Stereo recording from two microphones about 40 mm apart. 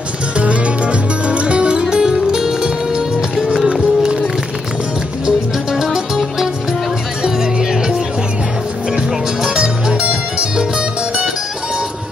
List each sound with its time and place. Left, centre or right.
0.4 s music: right; by 3.5 s centre
5.2 s music: centre
7.2 s music: centre
9.6 s music: right